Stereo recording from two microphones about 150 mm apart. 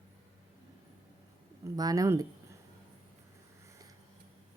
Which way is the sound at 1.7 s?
25° right (ahead or behind).